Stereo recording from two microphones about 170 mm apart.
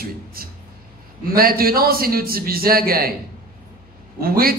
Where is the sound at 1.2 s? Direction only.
60° right (ahead or behind).